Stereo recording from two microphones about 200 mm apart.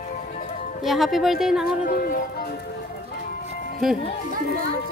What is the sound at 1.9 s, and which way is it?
Music, 45° left (ahead or behind).